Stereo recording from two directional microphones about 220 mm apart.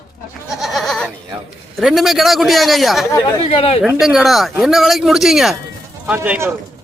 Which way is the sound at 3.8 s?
5° right (ahead or behind).